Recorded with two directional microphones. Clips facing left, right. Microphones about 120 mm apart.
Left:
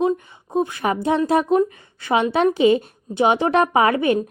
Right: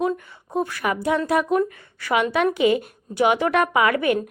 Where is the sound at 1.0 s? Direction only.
25° left (ahead or behind).